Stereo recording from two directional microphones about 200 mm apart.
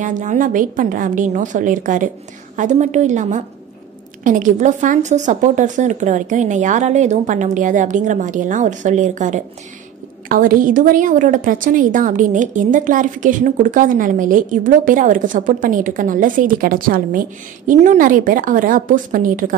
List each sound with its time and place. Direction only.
0.0 s a woman's voice: 35° right (ahead or behind)